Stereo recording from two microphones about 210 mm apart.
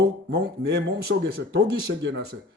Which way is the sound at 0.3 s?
55° right (ahead or behind).